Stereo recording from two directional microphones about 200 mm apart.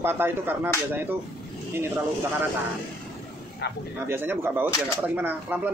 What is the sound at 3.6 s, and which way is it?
Speech, 60° left (ahead or behind).